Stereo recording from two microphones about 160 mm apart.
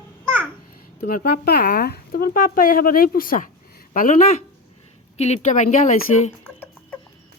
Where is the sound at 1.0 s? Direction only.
65° left (ahead or behind).